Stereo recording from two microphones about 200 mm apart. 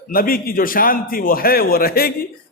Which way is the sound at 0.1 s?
45° left (ahead or behind).